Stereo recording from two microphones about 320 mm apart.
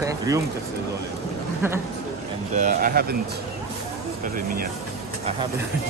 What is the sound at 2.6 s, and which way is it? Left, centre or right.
Speech, right.